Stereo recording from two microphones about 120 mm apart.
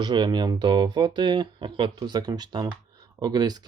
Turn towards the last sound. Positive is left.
turn(degrees=-35)  # may be behind; listen again after turning